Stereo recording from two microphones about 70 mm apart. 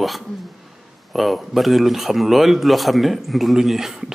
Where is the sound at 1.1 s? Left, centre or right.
Centre.